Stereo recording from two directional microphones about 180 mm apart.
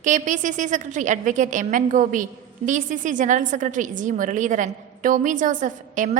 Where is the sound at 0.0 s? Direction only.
45° right (ahead or behind).